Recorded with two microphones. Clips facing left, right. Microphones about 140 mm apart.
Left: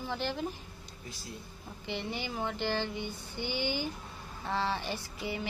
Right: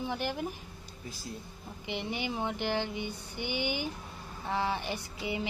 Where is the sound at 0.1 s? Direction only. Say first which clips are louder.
Left 4 dB; 15° right (ahead or behind).